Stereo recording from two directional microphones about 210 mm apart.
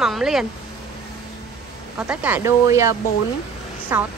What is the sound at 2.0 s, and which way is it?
Speech, 5° right (ahead or behind).